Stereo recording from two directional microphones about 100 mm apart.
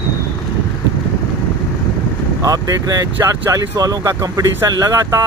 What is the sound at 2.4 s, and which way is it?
Speech, 35° right (ahead or behind).